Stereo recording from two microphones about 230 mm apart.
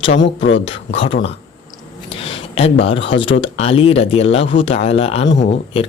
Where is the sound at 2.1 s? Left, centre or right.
Left.